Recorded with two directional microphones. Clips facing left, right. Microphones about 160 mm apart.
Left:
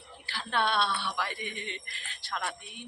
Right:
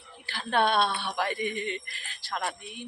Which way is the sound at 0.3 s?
50° right (ahead or behind).